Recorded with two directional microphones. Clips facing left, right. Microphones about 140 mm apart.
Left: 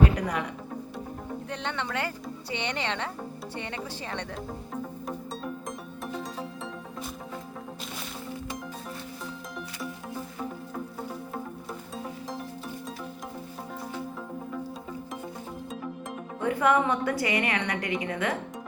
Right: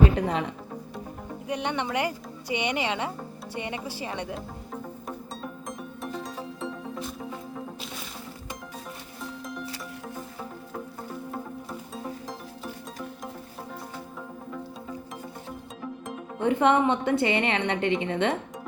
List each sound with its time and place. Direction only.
0.2 s music: 25° right (ahead or behind)
1.5 s a woman's voice: 15° right (ahead or behind)
5.0 s music: centre (ahead or behind)
16.4 s a woman's voice: 25° right (ahead or behind)